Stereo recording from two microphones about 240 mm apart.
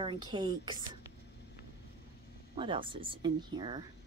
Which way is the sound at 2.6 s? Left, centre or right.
Right.